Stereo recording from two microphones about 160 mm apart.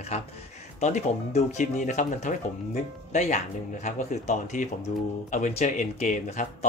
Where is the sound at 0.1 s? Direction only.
45° left (ahead or behind).